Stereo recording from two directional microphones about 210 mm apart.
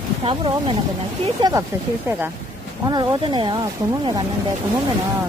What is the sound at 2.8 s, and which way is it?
Speech, 20° right (ahead or behind).